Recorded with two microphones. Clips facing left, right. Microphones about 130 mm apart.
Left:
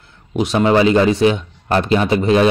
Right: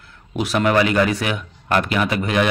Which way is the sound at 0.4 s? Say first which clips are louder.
Left 4 dB; 25° left (ahead or behind).